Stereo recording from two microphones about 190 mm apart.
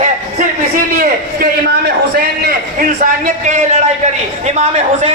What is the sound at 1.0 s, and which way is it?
A man's voice, 50° right (ahead or behind).